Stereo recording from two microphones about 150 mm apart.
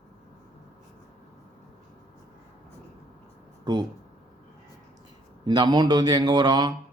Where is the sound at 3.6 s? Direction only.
25° right (ahead or behind).